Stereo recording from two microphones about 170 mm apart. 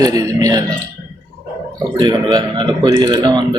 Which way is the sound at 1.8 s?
25° right (ahead or behind).